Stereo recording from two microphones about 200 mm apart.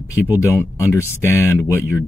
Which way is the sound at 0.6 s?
15° left (ahead or behind).